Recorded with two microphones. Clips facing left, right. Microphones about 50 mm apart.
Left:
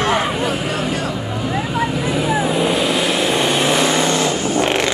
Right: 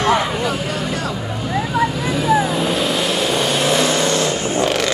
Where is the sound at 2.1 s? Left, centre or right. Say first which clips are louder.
Right 2 dB; left.